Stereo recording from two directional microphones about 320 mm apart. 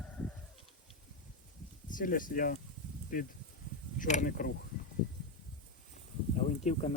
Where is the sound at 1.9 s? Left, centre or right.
Left.